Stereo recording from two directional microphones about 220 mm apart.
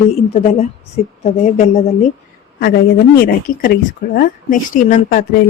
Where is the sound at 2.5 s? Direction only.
45° left (ahead or behind).